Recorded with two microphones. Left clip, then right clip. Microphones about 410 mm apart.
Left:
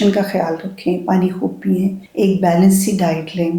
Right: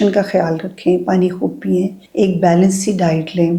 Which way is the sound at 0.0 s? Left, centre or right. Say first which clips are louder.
Right 2 dB; right.